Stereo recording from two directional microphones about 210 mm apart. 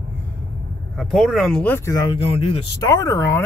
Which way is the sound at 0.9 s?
Centre (ahead or behind).